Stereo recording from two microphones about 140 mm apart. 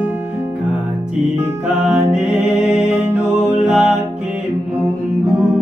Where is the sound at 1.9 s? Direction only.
5° right (ahead or behind).